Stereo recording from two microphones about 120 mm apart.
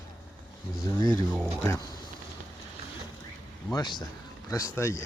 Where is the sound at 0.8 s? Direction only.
35° left (ahead or behind).